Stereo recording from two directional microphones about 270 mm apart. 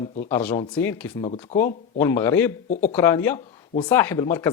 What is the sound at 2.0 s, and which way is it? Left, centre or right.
Speech, centre.